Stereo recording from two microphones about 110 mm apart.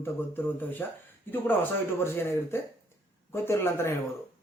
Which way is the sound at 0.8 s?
20° left (ahead or behind).